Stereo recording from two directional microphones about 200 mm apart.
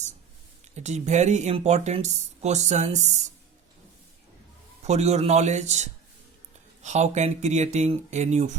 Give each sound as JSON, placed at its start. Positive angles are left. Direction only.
{"t": 0.8, "sound": "speech", "side_deg": -35}
{"t": 4.9, "sound": "speech", "side_deg": -35}